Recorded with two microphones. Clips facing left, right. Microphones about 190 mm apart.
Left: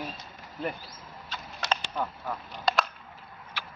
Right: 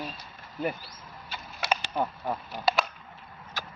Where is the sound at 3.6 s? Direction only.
45° right (ahead or behind).